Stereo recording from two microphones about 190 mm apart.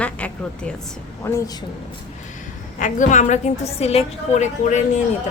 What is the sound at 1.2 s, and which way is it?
Speech, 10° left (ahead or behind).